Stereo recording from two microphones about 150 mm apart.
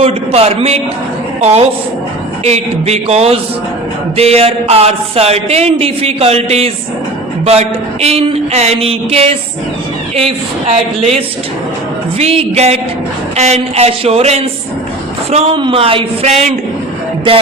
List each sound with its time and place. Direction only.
0.0 s speech: 40° right (ahead or behind)
12.2 s speech: 45° right (ahead or behind)